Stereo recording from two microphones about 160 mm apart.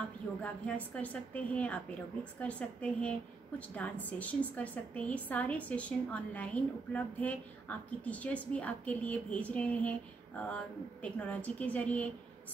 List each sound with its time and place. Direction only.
0.4 s a woman's voice: 10° left (ahead or behind)